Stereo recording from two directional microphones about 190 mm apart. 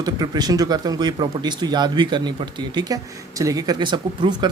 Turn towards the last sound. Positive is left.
turn(degrees=-25)  # may be behind; listen again after turning